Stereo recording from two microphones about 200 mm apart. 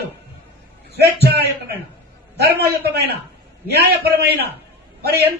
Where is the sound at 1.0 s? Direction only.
50° right (ahead or behind).